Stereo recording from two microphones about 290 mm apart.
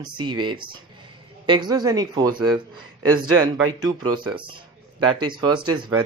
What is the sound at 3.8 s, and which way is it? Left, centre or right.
Speech, centre.